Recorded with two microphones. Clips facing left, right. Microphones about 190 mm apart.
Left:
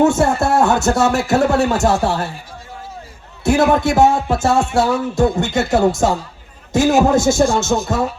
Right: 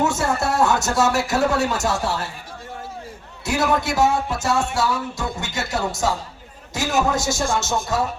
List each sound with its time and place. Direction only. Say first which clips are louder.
0.0 s speech: left 7 dB; 55° left (ahead or behind)
3.4 s music: left 7 dB; 55° left (ahead or behind)